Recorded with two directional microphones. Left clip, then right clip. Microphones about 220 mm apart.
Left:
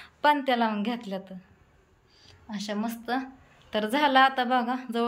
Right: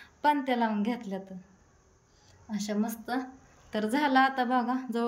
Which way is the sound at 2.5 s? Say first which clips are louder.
Left 1 dB; 5° right (ahead or behind).